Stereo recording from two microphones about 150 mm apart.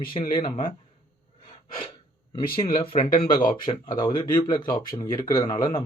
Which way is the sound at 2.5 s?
35° left (ahead or behind).